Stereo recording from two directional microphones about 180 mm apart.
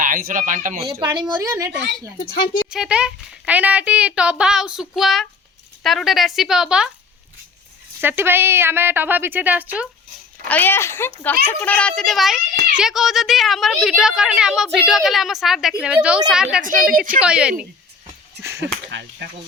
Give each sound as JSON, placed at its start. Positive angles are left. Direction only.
{"t": 0.0, "sound": "speech", "side_deg": -50}
{"t": 1.3, "sound": "speech", "side_deg": -20}
{"t": 2.3, "sound": "a woman's voice", "side_deg": 55}
{"t": 2.6, "sound": "a woman's voice", "side_deg": -5}
{"t": 8.0, "sound": "a woman's voice", "side_deg": -10}
{"t": 10.5, "sound": "a woman's voice", "side_deg": 10}
{"t": 16.6, "sound": "speech", "side_deg": -50}
{"t": 17.2, "sound": "a woman's voice", "side_deg": -5}
{"t": 18.9, "sound": "speech", "side_deg": -80}